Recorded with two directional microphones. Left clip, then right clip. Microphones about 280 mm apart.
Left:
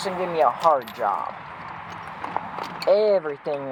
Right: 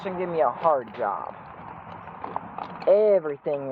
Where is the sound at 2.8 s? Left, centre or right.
Centre.